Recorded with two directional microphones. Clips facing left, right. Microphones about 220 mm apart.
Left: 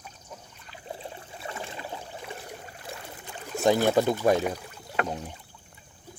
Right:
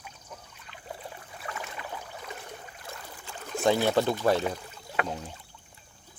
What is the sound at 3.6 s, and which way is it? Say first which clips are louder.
Speech: left 2 dB; 15° left (ahead or behind).